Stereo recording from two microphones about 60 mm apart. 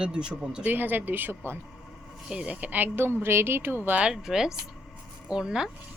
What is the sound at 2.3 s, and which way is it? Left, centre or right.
Speech, centre.